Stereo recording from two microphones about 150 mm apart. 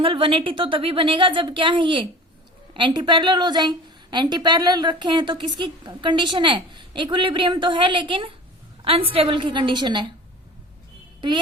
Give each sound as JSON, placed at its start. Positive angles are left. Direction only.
{"t": 0.0, "sound": "a woman's voice", "side_deg": -35}